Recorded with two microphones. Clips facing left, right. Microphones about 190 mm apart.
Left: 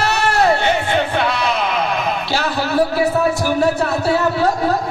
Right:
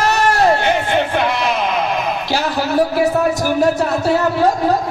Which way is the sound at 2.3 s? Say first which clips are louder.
Right 2 dB; 15° right (ahead or behind).